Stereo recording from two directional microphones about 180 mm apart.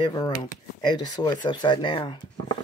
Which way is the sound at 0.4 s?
25° left (ahead or behind).